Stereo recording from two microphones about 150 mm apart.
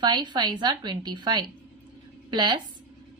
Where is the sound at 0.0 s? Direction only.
30° right (ahead or behind).